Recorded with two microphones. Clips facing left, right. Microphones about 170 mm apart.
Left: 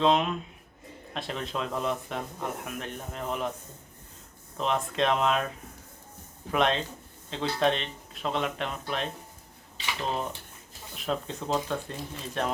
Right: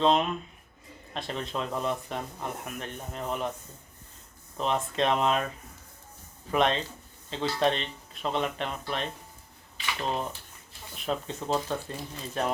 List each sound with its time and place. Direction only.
0.0 s speech: centre (ahead or behind)
4.5 s speech: centre (ahead or behind)
6.5 s speech: centre (ahead or behind)
10.1 s speech: centre (ahead or behind)